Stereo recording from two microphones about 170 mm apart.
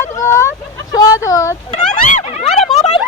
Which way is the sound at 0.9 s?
20° left (ahead or behind).